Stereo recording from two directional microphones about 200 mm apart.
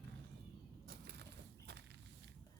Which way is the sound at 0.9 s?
55° right (ahead or behind).